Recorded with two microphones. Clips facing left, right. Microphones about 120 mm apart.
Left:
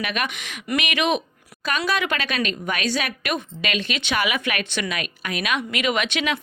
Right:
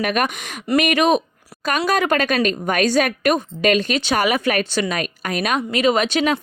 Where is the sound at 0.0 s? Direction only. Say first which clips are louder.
Right 6 dB; 45° right (ahead or behind).